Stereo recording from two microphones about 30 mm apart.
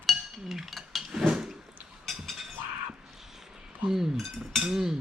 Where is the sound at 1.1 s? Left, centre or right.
Centre.